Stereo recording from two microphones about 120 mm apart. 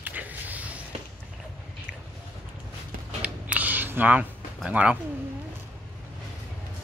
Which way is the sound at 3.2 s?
10° right (ahead or behind).